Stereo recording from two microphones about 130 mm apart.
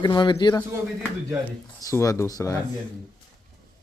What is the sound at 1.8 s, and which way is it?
Speech, 25° left (ahead or behind).